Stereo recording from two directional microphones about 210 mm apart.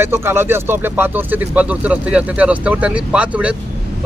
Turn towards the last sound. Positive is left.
turn(degrees=-5)  # may be behind; listen again after turning